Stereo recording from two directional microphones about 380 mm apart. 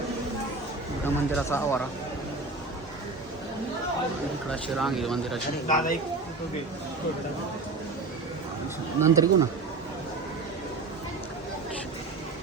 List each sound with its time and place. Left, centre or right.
1.0 s speech: centre
4.8 s speech: centre
5.6 s speech: centre
9.0 s speech: centre